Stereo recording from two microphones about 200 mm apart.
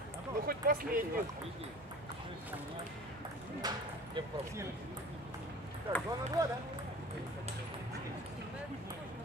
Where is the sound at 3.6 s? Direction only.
20° right (ahead or behind).